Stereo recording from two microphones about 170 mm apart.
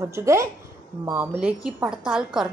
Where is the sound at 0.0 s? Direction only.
15° right (ahead or behind).